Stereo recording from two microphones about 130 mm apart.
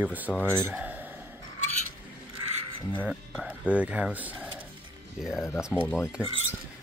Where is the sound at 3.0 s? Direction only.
5° right (ahead or behind).